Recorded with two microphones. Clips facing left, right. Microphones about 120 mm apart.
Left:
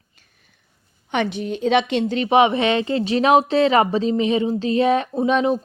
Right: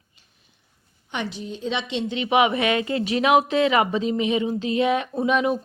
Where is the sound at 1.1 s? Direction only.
65° left (ahead or behind).